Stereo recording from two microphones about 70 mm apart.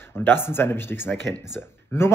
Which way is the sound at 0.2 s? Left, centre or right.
Left.